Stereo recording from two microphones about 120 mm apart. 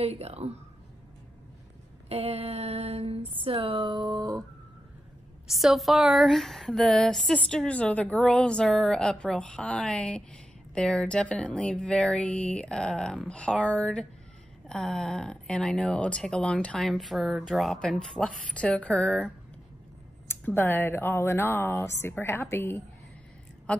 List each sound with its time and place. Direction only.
0.0 s mantra: 60° right (ahead or behind)
2.0 s mantra: 60° right (ahead or behind)
3.4 s speech: 50° right (ahead or behind); by 4.4 s 30° right (ahead or behind)
5.5 s speech: centre (ahead or behind)
20.2 s speech: 20° left (ahead or behind)
23.7 s speech: 10° left (ahead or behind)